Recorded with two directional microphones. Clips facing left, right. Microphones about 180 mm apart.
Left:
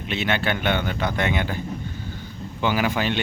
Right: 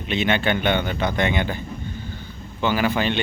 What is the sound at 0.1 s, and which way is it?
A man's voice, 5° left (ahead or behind).